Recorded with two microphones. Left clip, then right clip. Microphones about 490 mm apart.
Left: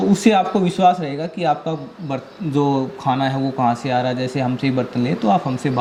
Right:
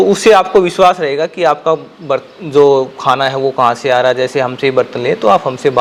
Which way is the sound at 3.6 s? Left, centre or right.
Right.